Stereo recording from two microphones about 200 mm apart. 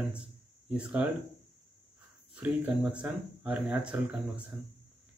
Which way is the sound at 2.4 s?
5° right (ahead or behind).